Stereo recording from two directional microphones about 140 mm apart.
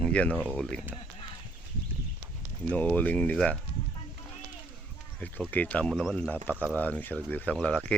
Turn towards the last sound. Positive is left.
turn(degrees=5)  # may be behind; listen again after turning